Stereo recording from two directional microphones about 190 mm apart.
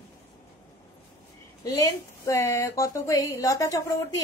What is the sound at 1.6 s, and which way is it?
Speech, 20° left (ahead or behind).